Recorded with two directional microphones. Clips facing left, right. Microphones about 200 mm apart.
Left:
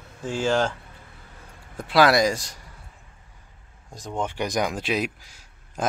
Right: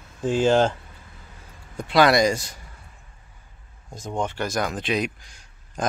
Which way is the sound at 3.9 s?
Centre (ahead or behind).